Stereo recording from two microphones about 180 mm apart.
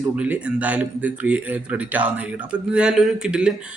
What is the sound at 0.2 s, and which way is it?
Speech, 5° right (ahead or behind).